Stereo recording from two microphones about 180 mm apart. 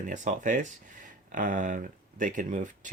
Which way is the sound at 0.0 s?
45° right (ahead or behind).